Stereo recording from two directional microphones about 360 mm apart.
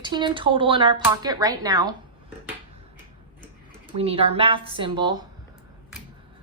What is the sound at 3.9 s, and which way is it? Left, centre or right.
Speech, centre.